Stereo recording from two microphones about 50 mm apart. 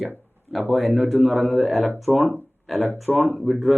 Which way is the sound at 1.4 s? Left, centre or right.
Right.